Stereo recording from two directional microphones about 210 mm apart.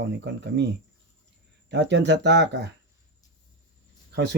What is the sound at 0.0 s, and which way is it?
Speech, 55° right (ahead or behind).